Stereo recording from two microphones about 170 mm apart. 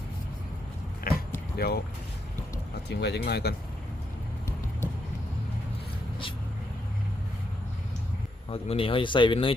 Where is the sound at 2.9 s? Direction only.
80° left.